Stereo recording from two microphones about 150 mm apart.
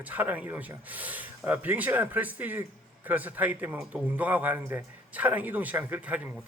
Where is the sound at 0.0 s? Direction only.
10° right (ahead or behind).